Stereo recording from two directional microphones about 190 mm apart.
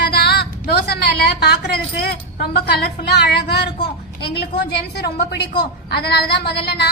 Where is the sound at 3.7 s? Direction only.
25° left (ahead or behind).